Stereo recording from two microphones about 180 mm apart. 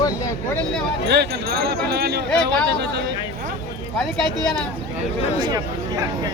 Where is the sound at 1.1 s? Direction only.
65° right (ahead or behind).